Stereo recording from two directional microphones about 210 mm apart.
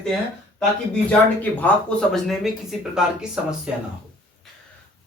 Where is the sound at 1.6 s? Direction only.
5° left (ahead or behind).